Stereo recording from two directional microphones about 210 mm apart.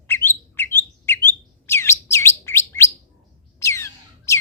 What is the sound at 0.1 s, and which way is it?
Bird, 10° left (ahead or behind).